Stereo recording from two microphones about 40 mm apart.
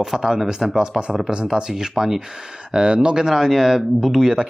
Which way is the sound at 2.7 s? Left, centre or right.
Right.